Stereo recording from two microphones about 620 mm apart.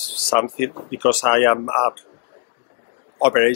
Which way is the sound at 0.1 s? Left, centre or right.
Right.